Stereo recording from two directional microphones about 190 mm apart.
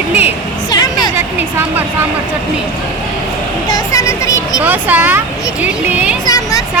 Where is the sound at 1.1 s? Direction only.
10° right (ahead or behind).